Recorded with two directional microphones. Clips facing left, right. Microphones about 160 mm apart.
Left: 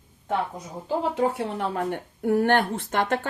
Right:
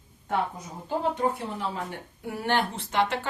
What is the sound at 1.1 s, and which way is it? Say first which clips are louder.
Speech: left 4 dB; 60° left (ahead or behind).